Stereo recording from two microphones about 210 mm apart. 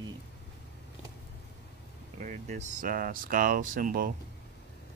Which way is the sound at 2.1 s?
35° right (ahead or behind).